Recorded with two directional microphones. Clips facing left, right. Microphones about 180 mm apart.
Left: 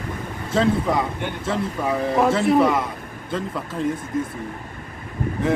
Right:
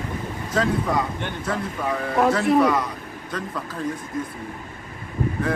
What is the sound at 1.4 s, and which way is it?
Speech, 25° left (ahead or behind).